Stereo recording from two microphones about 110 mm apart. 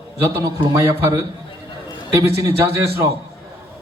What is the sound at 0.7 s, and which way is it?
A man's voice, 25° right (ahead or behind).